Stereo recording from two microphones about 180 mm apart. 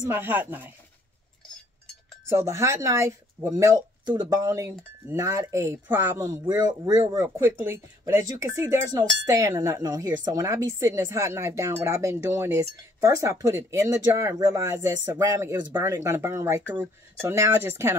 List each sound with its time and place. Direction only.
0.0 s speech: 10° right (ahead or behind)
2.2 s speech: 15° right (ahead or behind)